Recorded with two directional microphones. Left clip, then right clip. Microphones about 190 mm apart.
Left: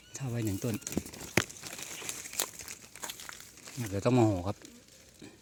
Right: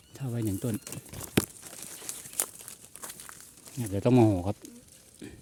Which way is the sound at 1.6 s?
45° left (ahead or behind).